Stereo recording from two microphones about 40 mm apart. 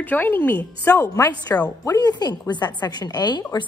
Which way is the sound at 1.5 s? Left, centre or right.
Left.